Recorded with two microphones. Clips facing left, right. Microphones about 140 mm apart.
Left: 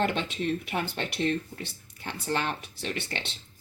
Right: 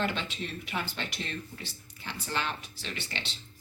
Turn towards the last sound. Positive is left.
turn(degrees=55)  # may be behind; listen again after turning